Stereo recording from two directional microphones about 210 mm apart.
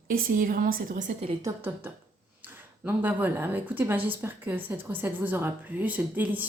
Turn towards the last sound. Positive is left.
turn(degrees=-10)  # may be behind; listen again after turning